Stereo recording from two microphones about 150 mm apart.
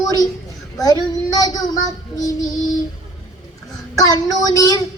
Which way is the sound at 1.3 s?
25° left (ahead or behind).